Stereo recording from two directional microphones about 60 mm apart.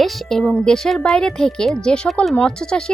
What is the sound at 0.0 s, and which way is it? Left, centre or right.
Speech, centre.